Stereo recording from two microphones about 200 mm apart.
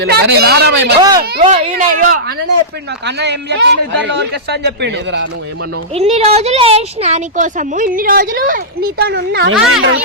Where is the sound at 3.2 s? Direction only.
60° right (ahead or behind).